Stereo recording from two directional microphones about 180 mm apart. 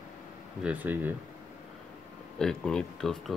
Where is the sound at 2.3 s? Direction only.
5° left (ahead or behind).